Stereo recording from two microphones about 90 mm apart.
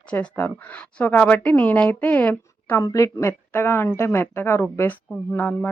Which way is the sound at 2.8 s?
40° left (ahead or behind).